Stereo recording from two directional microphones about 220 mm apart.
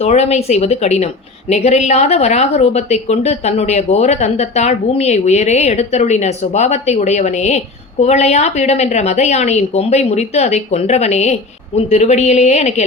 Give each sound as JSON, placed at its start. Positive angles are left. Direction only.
{"t": 0.0, "sound": "a woman's voice", "side_deg": 30}